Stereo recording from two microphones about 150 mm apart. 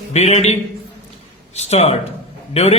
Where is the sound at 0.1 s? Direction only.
45° left (ahead or behind).